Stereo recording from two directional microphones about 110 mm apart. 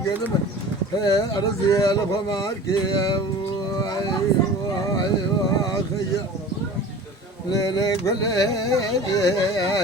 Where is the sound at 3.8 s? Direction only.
40° left (ahead or behind).